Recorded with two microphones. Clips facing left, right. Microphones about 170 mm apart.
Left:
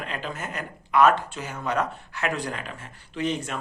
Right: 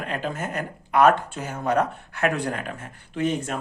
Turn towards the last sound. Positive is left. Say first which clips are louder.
# right 3 dB
turn(degrees=-50)  # may be behind; listen again after turning